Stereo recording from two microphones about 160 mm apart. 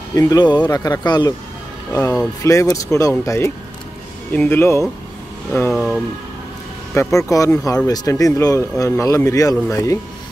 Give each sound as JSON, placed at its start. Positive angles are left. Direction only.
{"t": 0.1, "sound": "speech", "side_deg": 20}
{"t": 5.7, "sound": "speech", "side_deg": 0}
{"t": 6.9, "sound": "speech", "side_deg": 15}